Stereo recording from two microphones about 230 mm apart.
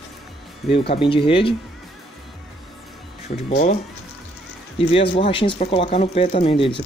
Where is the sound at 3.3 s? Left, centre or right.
Left.